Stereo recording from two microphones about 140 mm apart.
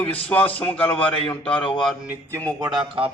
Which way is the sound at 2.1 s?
20° right (ahead or behind).